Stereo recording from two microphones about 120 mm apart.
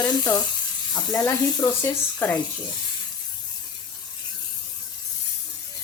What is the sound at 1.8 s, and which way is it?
Speech, 15° left (ahead or behind).